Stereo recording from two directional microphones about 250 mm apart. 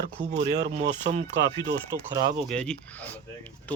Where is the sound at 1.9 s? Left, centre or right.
Centre.